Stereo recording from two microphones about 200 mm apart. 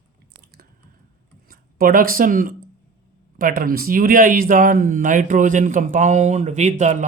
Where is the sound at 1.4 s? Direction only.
50° right (ahead or behind).